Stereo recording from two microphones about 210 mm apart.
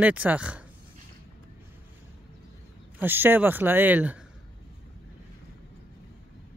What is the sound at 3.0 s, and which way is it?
Speech, 10° right (ahead or behind).